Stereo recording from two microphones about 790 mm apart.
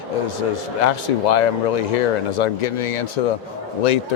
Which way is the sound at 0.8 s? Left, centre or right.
Left.